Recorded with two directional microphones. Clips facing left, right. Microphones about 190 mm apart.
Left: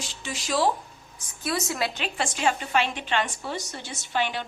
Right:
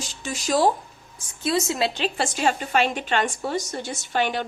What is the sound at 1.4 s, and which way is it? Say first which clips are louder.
A woman's voice: right 5 dB; 25° right (ahead or behind).